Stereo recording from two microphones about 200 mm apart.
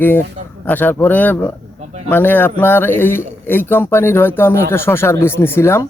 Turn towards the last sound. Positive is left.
turn(degrees=10)  # may be behind; listen again after turning